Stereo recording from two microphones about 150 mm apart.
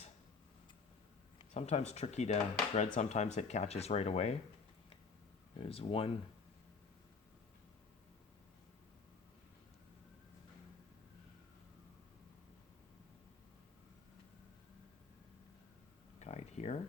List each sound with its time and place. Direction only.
1.5 s speech: 45° left (ahead or behind)
5.5 s speech: 40° left (ahead or behind)
16.2 s a sound: 45° left (ahead or behind)